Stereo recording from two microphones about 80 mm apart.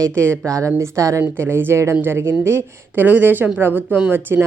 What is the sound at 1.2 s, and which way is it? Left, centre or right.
A woman's voice, right.